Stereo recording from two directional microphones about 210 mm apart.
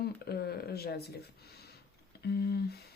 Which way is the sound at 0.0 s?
50° left (ahead or behind).